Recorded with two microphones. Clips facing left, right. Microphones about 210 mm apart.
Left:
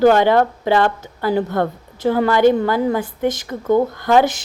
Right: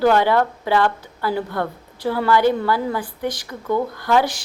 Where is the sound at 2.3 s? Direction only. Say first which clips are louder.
Left 2 dB; 20° left (ahead or behind).